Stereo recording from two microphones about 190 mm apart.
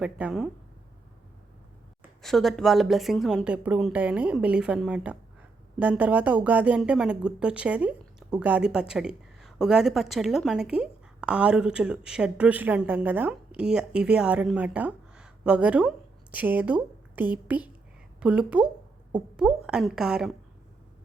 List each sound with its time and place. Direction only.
0.0 s speech: 5° right (ahead or behind)
2.2 s a woman's voice: centre (ahead or behind)